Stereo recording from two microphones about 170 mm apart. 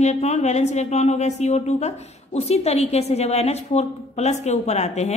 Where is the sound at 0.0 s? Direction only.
40° left (ahead or behind).